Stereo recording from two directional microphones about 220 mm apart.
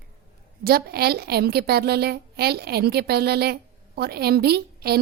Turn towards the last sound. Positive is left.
turn(degrees=-45)  # may be behind; listen again after turning